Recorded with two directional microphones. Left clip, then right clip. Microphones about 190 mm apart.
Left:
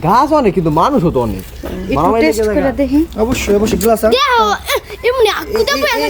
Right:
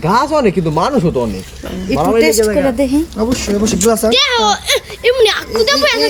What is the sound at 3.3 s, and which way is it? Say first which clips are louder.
Speech: left 5 dB; 25° left (ahead or behind).